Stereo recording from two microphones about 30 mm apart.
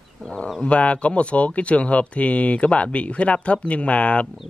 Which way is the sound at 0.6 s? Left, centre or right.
Left.